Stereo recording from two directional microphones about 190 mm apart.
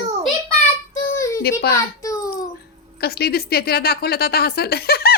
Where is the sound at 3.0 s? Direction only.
55° left (ahead or behind).